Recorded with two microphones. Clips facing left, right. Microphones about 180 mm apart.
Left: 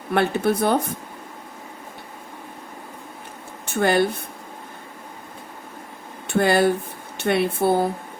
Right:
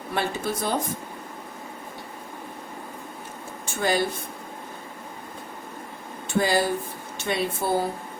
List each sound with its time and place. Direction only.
0.1 s speech: 60° left (ahead or behind)
3.7 s speech: 60° left (ahead or behind)
6.2 s speech: 60° left (ahead or behind)